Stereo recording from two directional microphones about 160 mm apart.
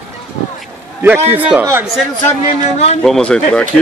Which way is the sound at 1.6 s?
15° right (ahead or behind).